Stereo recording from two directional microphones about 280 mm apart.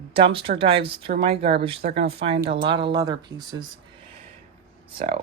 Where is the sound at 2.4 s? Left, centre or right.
Right.